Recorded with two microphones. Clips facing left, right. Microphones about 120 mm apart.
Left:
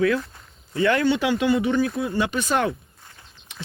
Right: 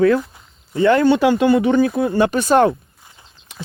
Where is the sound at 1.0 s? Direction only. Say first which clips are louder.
Right 7 dB; 50° right (ahead or behind).